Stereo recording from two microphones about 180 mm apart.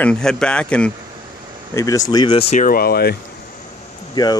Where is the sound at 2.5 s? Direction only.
50° left (ahead or behind).